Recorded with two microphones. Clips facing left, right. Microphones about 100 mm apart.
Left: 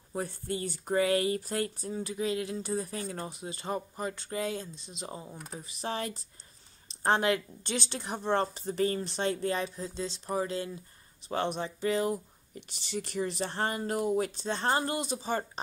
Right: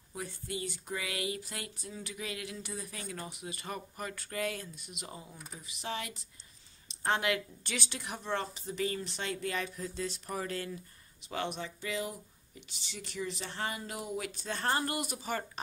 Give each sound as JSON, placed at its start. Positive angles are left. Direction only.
{"t": 0.1, "sound": "speech", "side_deg": 40}
{"t": 11.2, "sound": "speech", "side_deg": 35}